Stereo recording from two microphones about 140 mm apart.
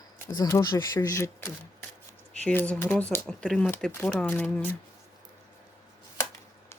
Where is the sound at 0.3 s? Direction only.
25° left (ahead or behind).